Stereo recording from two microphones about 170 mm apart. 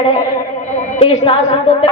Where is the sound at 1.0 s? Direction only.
35° left (ahead or behind).